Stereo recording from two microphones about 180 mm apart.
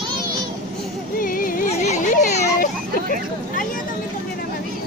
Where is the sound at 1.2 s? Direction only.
50° left (ahead or behind).